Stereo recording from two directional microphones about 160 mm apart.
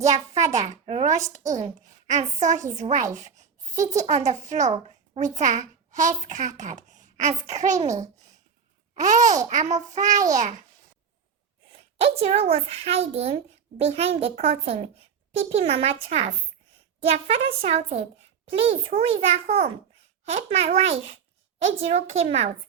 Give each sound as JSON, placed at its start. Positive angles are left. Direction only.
{"t": 0.1, "sound": "a child's voice", "side_deg": -20}
{"t": 0.5, "sound": "a child's voice", "side_deg": -45}
{"t": 9.0, "sound": "a child's voice", "side_deg": -50}
{"t": 11.9, "sound": "a woman's voice", "side_deg": -40}